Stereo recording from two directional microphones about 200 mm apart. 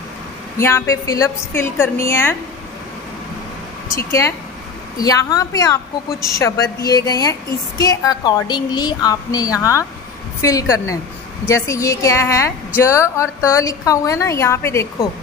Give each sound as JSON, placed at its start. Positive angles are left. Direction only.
{"t": 0.6, "sound": "a woman's voice", "side_deg": 15}
{"t": 3.9, "sound": "a woman's voice", "side_deg": 15}